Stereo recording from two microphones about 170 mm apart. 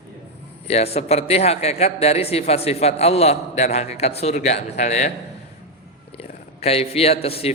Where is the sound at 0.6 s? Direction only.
35° left (ahead or behind).